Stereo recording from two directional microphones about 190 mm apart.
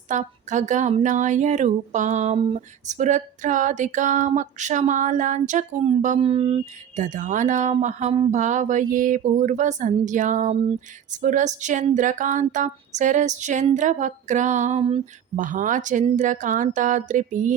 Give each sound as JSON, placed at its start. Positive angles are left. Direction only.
{"t": 0.1, "sound": "a woman's voice", "side_deg": -40}
{"t": 15.4, "sound": "a woman's voice", "side_deg": -45}